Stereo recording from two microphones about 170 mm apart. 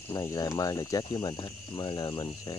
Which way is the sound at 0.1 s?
20° left (ahead or behind).